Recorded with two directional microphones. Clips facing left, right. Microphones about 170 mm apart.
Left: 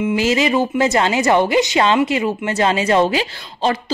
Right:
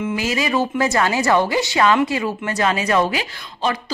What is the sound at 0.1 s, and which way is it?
A woman's voice, 25° left (ahead or behind).